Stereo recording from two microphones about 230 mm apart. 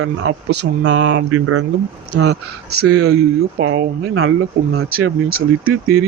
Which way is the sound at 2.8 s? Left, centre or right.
Right.